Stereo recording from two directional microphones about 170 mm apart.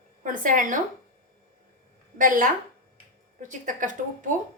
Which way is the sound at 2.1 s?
50° right (ahead or behind).